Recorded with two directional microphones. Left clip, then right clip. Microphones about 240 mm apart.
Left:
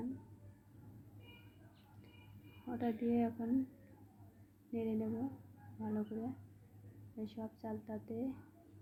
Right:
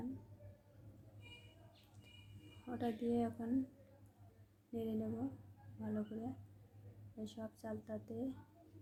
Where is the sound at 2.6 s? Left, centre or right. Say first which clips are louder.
Left 2 dB; centre.